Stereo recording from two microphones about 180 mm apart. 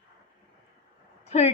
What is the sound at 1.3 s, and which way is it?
Speech, 35° left (ahead or behind).